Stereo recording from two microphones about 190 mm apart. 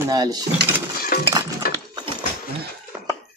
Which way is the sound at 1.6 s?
50° left (ahead or behind).